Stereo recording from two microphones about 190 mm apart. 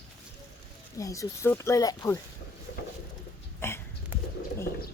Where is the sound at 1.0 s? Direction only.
15° left (ahead or behind).